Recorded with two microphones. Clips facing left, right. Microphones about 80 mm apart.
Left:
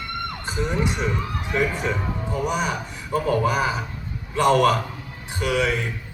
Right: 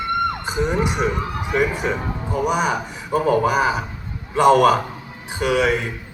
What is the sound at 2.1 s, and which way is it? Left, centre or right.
A man's voice, centre.